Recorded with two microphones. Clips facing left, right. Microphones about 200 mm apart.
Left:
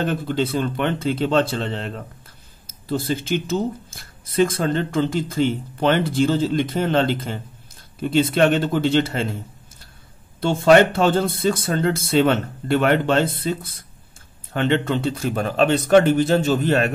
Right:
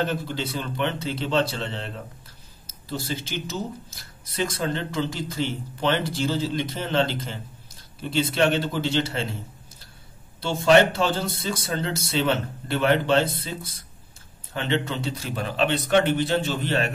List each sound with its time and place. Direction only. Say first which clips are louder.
0.1 s speech: left 7 dB; 55° left (ahead or behind)
10.4 s speech: left 4 dB; 55° left (ahead or behind)